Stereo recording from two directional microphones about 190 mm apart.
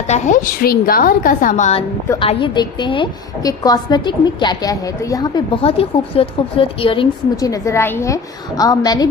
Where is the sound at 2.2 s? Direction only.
25° left (ahead or behind).